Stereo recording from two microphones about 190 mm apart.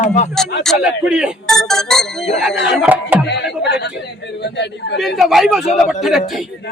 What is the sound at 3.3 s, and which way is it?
Speech, 65° left (ahead or behind).